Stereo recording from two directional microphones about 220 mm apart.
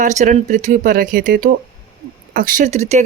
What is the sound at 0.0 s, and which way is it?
Speech, 35° right (ahead or behind).